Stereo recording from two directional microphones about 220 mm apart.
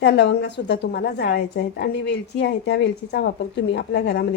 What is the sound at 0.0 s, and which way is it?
A woman's voice, 50° left (ahead or behind).